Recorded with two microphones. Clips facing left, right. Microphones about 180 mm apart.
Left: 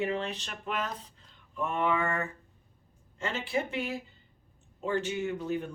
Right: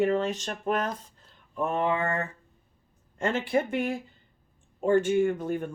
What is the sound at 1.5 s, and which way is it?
Mantra, 40° right (ahead or behind).